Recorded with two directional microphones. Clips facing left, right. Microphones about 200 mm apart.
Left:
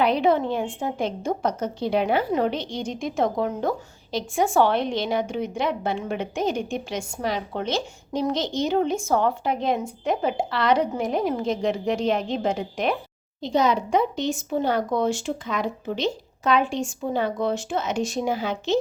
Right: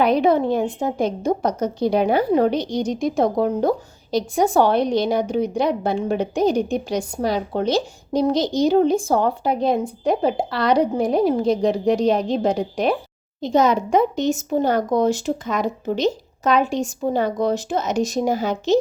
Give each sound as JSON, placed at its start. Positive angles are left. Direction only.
{"t": 0.0, "sound": "a woman's voice", "side_deg": -45}
{"t": 13.4, "sound": "a woman's voice", "side_deg": -45}